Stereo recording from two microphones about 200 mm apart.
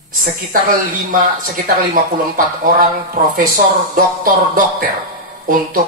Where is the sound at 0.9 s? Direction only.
45° right (ahead or behind).